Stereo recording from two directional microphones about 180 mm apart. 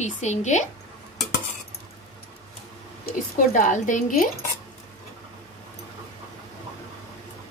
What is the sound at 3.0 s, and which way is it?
A woman's voice, 45° left (ahead or behind).